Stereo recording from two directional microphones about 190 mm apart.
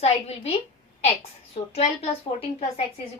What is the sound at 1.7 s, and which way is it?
Speech, 30° left (ahead or behind).